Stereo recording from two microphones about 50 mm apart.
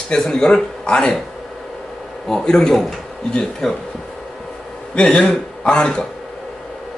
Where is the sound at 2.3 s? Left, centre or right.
Centre.